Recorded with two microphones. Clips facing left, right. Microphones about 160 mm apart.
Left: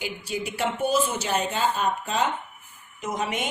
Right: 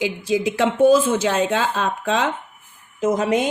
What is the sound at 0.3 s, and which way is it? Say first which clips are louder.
Speech: right 8 dB; 90° right.